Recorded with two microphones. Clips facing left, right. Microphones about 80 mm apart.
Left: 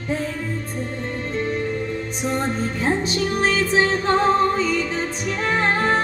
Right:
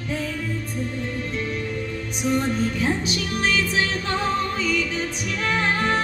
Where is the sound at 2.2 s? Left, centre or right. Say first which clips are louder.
Right 2 dB; left.